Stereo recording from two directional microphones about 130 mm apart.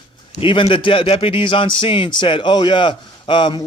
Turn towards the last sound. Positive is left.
turn(degrees=35)  # may be behind; listen again after turning